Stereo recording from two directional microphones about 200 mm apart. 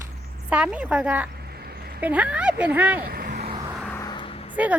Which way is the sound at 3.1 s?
50° right (ahead or behind).